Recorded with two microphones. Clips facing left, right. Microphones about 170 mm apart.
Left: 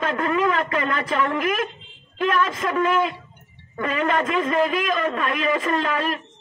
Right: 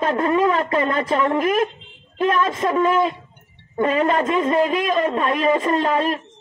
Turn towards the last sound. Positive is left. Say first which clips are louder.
# right 4 dB
turn(degrees=-35)  # may be behind; listen again after turning